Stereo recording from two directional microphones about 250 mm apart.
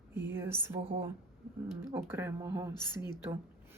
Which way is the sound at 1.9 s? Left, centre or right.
Centre.